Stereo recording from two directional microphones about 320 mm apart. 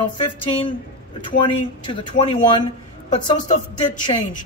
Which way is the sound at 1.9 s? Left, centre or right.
Centre.